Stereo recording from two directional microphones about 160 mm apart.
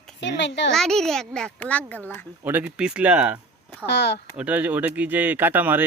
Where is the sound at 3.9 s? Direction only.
90° left.